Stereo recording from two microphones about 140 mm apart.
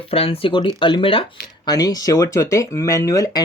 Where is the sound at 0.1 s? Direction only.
40° left (ahead or behind).